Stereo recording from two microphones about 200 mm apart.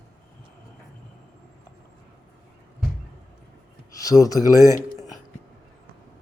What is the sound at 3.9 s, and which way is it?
Speech, 15° left (ahead or behind).